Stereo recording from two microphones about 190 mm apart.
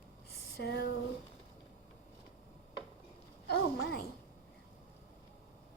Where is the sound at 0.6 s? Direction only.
60° left (ahead or behind).